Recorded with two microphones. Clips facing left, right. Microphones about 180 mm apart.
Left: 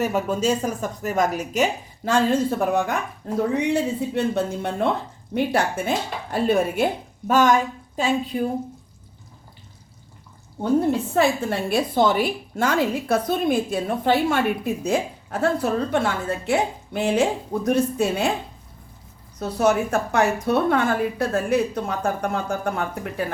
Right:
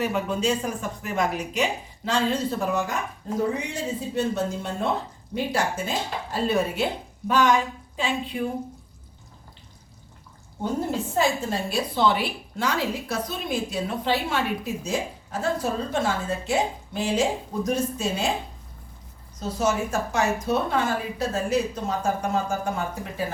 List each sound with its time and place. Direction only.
0.0 s speech: 45° left (ahead or behind)
2.0 s a woman's voice: 55° left (ahead or behind)
11.1 s a woman's voice: 60° left (ahead or behind)
19.4 s a woman's voice: 60° left (ahead or behind)